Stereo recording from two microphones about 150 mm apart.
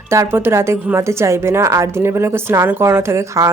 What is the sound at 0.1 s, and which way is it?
A woman's voice, 15° right (ahead or behind).